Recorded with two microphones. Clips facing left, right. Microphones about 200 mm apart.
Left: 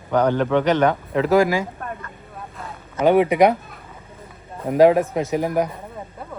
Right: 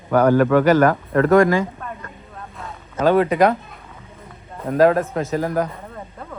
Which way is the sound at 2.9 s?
15° left (ahead or behind).